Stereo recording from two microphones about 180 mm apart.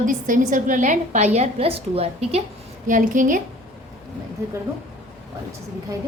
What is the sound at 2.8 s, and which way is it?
Speech, 45° right (ahead or behind).